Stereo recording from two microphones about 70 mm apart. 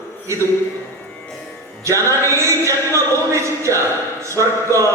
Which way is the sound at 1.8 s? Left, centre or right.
Right.